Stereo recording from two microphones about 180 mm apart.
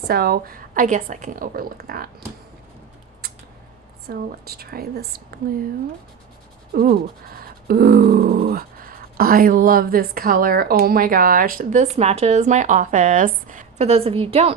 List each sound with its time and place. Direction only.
0.1 s speech: 55° right (ahead or behind)
4.1 s speech: 60° right (ahead or behind)
6.7 s speech: 50° right (ahead or behind); by 14.5 s 35° right (ahead or behind)